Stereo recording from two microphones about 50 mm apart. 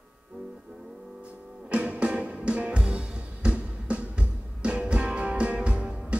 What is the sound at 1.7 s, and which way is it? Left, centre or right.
Music, right.